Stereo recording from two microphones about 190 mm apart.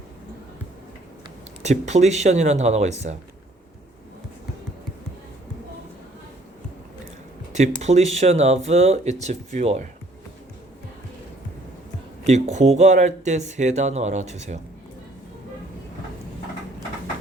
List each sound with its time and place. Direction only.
1.6 s speech: 35° right (ahead or behind)
7.8 s speech: 35° right (ahead or behind)
12.2 s speech: 35° right (ahead or behind)